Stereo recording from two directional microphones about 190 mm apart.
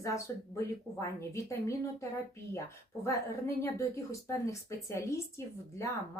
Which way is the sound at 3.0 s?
15° left (ahead or behind).